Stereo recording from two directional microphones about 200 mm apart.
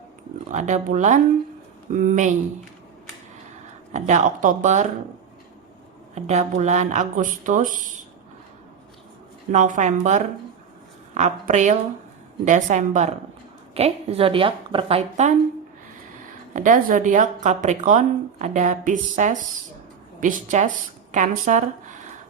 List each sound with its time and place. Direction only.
0.4 s speech: 35° right (ahead or behind)
3.9 s speech: 35° right (ahead or behind)
6.1 s speech: 35° right (ahead or behind)
9.5 s a woman's voice: 40° right (ahead or behind)
16.6 s speech: 40° right (ahead or behind)